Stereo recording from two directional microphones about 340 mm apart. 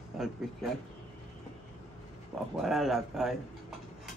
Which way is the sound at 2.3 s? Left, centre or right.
Centre.